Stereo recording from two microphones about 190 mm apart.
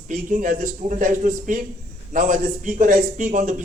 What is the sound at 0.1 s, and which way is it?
A man's voice, 45° right (ahead or behind).